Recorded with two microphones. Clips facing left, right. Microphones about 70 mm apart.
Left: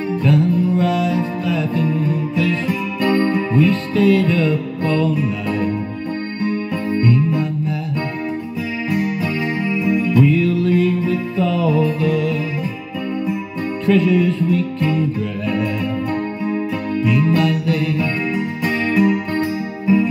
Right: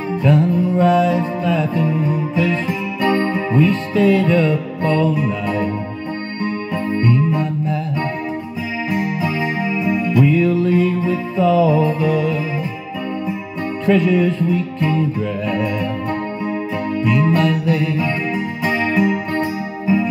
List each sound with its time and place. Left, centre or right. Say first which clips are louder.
0.2 s music: right 1 dB; centre
6.9 s music: even; centre
8.9 s music: even; centre
13.8 s music: even; centre
17.0 s music: even; centre